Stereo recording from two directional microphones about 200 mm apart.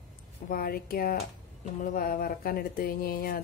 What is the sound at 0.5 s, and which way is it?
Speech, 45° left (ahead or behind).